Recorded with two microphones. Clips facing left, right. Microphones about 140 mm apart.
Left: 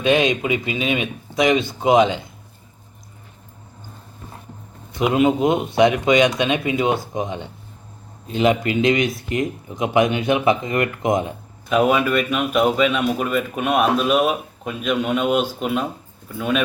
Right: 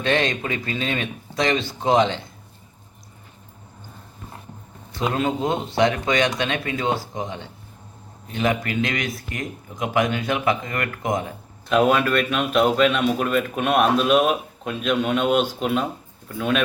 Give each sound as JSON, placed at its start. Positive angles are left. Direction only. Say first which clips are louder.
{"t": 0.0, "sound": "speech", "louder": "left 4 dB", "side_deg": 15}
{"t": 4.9, "sound": "speech", "louder": "left 6 dB", "side_deg": 15}
{"t": 11.7, "sound": "a man's voice", "louder": "left 1 dB", "side_deg": 5}